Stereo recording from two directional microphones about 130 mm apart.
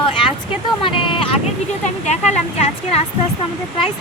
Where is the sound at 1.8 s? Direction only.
60° left (ahead or behind).